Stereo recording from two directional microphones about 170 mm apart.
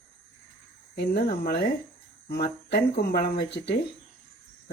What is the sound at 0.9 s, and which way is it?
Speech, 80° left.